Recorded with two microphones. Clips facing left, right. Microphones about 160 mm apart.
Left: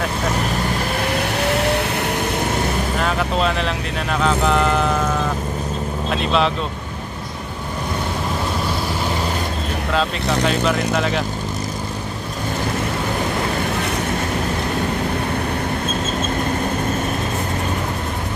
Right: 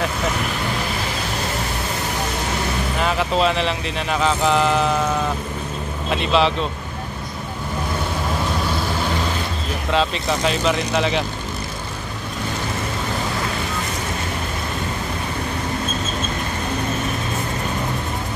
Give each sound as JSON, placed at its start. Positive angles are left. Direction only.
{"t": 1.3, "sound": "vehicle", "side_deg": 70}
{"t": 3.0, "sound": "speech", "side_deg": 0}
{"t": 6.0, "sound": "speech", "side_deg": 0}
{"t": 9.9, "sound": "speech", "side_deg": 0}